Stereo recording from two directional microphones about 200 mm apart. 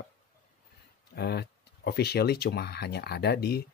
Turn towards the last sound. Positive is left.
turn(degrees=50)  # may be behind; listen again after turning